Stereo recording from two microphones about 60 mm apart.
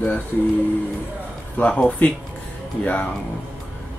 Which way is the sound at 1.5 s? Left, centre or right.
Left.